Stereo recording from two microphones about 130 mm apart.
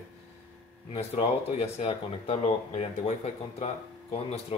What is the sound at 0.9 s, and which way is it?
Speech, 50° left (ahead or behind).